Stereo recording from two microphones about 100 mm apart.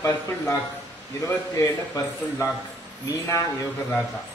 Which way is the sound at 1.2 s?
30° left (ahead or behind).